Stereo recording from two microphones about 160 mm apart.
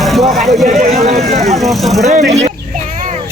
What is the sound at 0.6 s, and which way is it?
Speech, 45° right (ahead or behind).